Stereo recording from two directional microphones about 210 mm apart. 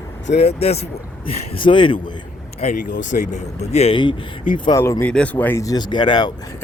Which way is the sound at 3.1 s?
35° left (ahead or behind).